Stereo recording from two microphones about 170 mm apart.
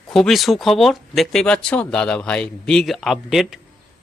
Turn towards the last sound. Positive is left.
turn(degrees=0)  # may be behind; listen again after turning